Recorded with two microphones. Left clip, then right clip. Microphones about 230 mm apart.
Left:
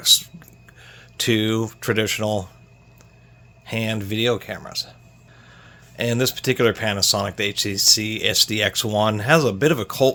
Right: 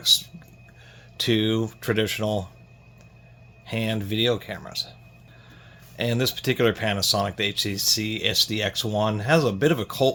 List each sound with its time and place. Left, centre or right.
0.0 s speech: left
3.7 s speech: left
6.0 s speech: left